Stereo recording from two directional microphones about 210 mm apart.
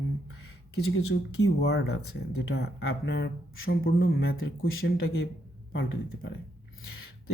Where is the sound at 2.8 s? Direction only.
65° left (ahead or behind).